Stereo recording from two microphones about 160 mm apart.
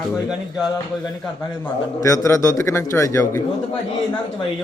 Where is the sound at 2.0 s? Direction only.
20° left (ahead or behind).